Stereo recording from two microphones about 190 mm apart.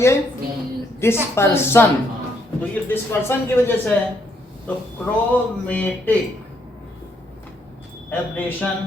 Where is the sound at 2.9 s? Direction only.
10° left (ahead or behind).